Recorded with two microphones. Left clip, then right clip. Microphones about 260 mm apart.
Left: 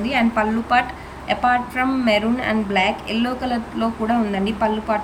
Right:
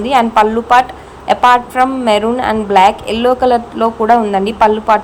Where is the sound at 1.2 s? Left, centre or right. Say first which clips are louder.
Right 10 dB; right.